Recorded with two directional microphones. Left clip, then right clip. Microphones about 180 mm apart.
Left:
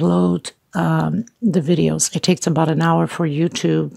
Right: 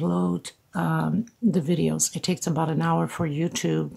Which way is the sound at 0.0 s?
35° left (ahead or behind).